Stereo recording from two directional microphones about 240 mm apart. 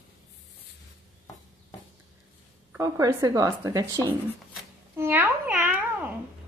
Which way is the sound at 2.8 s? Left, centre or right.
Centre.